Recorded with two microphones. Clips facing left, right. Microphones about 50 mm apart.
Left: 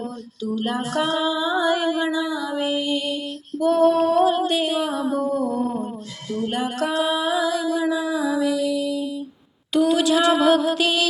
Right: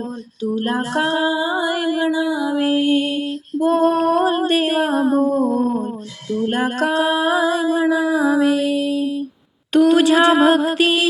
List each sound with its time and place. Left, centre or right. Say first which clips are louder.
0.4 s music: right 4 dB; right; by 2.6 s centre
2.6 s female singing: right 8 dB; right
6.5 s music: right 5 dB; right
9.7 s a sound: right 5 dB; right